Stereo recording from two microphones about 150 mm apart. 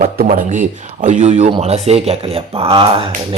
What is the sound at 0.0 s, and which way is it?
A man's voice, 60° right (ahead or behind).